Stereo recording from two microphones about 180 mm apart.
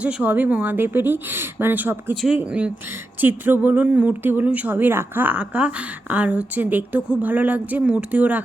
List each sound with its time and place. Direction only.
0.0 s speech: 5° right (ahead or behind)